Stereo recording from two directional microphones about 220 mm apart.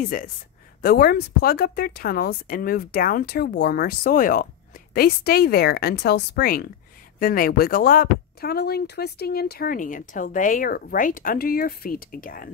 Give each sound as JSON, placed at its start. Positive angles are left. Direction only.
{"t": 0.0, "sound": "speech", "side_deg": 40}